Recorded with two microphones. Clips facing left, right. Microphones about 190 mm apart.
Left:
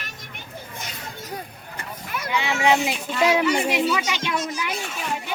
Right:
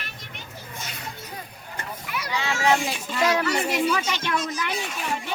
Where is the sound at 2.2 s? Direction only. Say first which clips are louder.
Left 2 dB; 15° left (ahead or behind).